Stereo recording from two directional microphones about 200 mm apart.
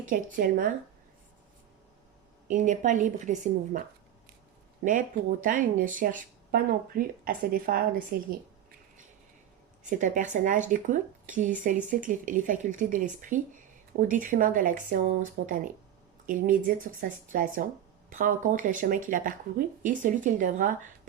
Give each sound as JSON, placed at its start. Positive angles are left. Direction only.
{"t": 0.1, "sound": "speech", "side_deg": -45}
{"t": 2.5, "sound": "speech", "side_deg": -40}
{"t": 10.0, "sound": "speech", "side_deg": -40}